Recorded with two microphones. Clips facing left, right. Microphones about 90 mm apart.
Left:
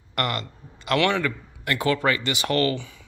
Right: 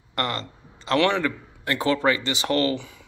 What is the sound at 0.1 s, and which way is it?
A man's voice, 25° right (ahead or behind).